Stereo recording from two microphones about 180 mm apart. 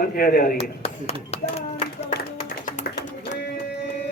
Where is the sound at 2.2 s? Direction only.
45° left (ahead or behind).